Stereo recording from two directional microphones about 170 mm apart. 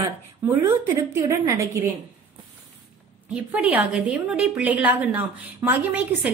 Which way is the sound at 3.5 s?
10° right (ahead or behind).